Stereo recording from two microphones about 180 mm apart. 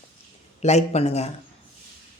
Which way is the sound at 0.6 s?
35° left (ahead or behind).